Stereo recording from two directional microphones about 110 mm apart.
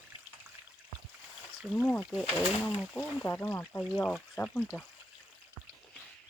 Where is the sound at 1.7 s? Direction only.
15° left (ahead or behind).